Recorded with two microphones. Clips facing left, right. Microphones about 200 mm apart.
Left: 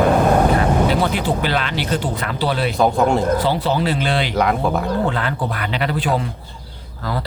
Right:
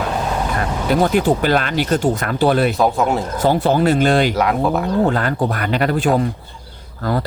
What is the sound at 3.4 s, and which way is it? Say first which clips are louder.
Speech: right 4 dB; 50° right (ahead or behind).